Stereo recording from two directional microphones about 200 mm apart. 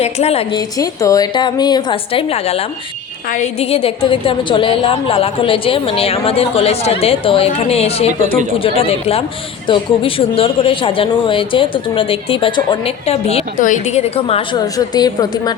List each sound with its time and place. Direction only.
0.0 s a woman's voice: 30° left (ahead or behind)
0.8 s a woman's voice: 15° left (ahead or behind)